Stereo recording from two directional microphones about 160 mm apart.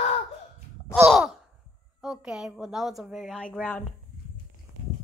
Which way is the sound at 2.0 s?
5° right (ahead or behind).